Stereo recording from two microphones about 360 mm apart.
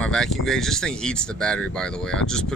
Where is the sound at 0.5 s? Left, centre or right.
Centre.